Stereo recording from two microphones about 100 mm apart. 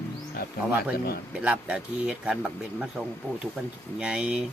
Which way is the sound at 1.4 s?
10° right (ahead or behind).